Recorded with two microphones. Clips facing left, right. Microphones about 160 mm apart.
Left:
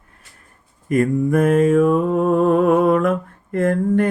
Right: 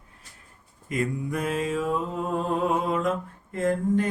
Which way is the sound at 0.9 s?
50° left (ahead or behind).